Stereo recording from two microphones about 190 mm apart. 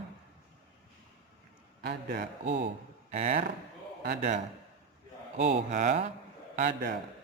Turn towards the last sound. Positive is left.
turn(degrees=-50)  # may be behind; listen again after turning